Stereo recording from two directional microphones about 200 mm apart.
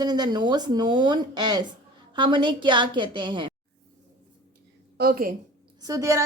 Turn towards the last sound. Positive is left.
turn(degrees=-15)  # may be behind; listen again after turning